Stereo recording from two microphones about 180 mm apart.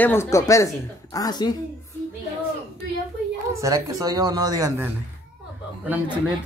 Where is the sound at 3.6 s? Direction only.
20° right (ahead or behind).